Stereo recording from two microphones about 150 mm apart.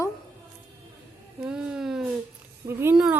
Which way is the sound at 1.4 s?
5° right (ahead or behind).